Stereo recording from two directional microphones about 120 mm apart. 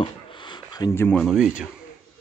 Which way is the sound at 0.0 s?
40° left (ahead or behind).